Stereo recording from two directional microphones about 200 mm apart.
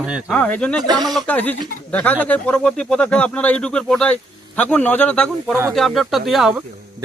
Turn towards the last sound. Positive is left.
turn(degrees=0)  # may be behind; listen again after turning